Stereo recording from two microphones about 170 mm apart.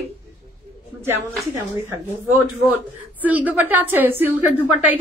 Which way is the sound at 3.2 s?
10° right (ahead or behind).